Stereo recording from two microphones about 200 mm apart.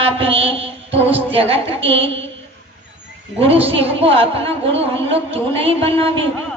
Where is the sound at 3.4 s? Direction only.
30° right (ahead or behind).